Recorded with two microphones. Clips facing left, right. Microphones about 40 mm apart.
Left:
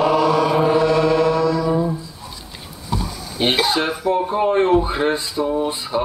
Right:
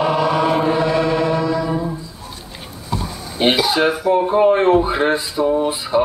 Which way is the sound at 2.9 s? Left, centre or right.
Centre.